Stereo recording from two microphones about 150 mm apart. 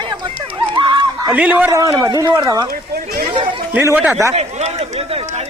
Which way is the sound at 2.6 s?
75° right (ahead or behind).